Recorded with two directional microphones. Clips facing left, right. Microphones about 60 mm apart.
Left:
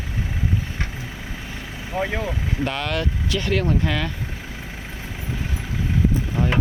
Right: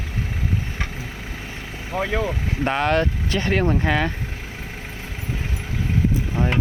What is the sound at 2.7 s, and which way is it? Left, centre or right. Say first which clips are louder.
Speech: right 8 dB; right.